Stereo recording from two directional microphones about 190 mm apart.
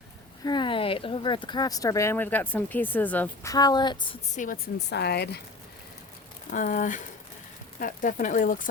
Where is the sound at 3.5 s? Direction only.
20° left (ahead or behind).